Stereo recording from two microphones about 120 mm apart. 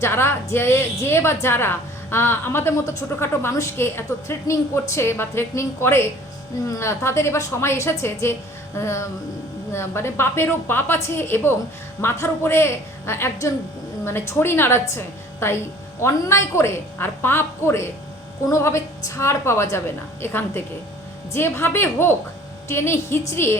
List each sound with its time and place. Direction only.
0.0 s a woman's voice: 20° left (ahead or behind)